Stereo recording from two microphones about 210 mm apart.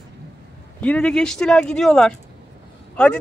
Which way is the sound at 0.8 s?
5° left (ahead or behind).